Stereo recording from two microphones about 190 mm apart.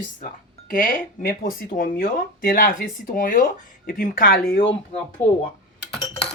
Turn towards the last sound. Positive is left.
turn(degrees=30)  # may be behind; listen again after turning